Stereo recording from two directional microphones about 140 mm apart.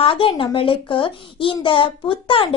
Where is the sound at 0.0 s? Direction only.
40° left (ahead or behind).